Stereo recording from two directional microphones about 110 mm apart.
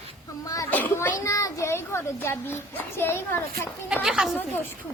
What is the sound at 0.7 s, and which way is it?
A woman's voice, 20° left (ahead or behind).